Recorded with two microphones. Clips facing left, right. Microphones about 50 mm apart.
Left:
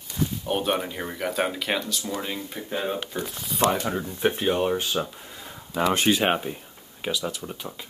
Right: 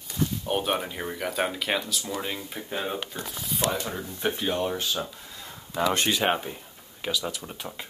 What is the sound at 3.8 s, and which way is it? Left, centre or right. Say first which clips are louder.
Speech: left 5 dB; left.